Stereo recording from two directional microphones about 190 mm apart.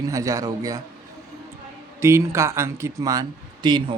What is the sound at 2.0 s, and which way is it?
Speech, 15° right (ahead or behind).